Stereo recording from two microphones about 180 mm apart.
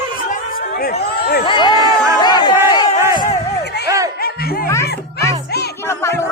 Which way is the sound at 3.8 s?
15° right (ahead or behind).